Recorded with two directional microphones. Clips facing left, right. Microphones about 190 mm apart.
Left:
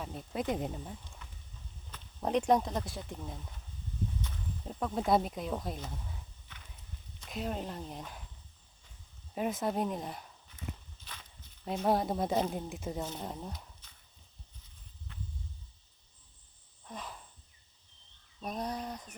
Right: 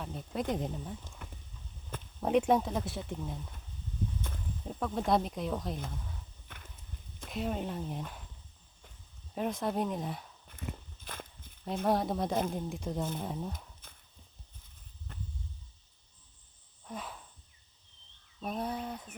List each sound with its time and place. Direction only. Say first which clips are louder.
0.0 s speech: even; centre (ahead or behind)
1.2 s clip-clop: right 6 dB; 55° right (ahead or behind)
2.2 s speech: right 1 dB; 5° right (ahead or behind)
4.3 s a sound: right 3 dB; 50° right (ahead or behind)
4.7 s speech: left 1 dB; centre (ahead or behind)
6.5 s clip-clop: right 4 dB; 50° right (ahead or behind)
7.3 s speech: right 2 dB; centre (ahead or behind)
9.3 s speech: even; 5° left (ahead or behind)
10.5 s walk: right 2 dB; 50° right (ahead or behind)
11.9 s speech: even; centre (ahead or behind)
13.8 s horse: right 6 dB; 50° right (ahead or behind)
15.1 s a sound: right 1 dB; 45° right (ahead or behind)
16.8 s cricket: right 2 dB; 5° right (ahead or behind)
18.3 s a sound: right 1 dB; 5° right (ahead or behind)